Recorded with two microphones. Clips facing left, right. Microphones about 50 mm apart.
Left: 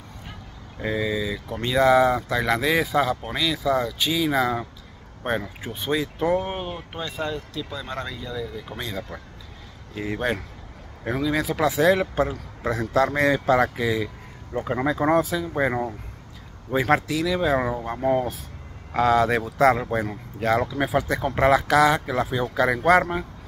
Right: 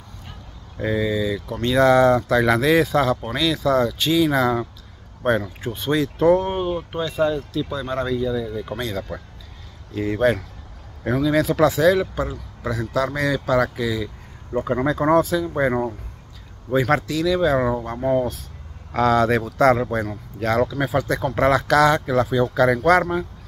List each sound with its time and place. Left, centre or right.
0.7 s speech: centre
11.8 s speech: left
14.6 s speech: centre
16.7 s speech: centre